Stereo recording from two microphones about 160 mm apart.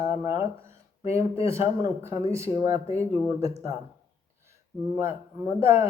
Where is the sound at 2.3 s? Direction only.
20° right (ahead or behind).